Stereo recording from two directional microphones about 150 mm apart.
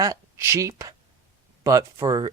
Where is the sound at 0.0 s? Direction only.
20° right (ahead or behind).